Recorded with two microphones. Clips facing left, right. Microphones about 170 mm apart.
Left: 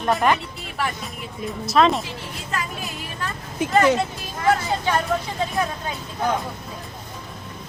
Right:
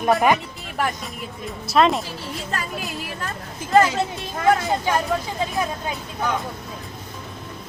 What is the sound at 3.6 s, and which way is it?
Speech, 65° left (ahead or behind).